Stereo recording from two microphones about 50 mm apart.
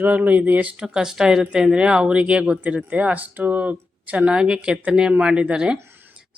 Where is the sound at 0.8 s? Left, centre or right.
Centre; by 4.3 s right.